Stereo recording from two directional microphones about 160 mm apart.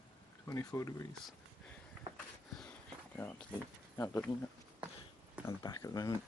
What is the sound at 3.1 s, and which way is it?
Speech, 10° left (ahead or behind).